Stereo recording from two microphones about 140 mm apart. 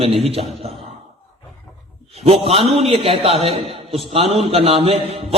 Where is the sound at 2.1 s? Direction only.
45° right (ahead or behind).